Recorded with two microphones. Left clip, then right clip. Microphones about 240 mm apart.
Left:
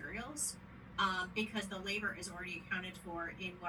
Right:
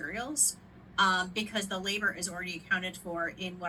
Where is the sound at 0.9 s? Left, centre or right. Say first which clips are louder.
Right 8 dB; right.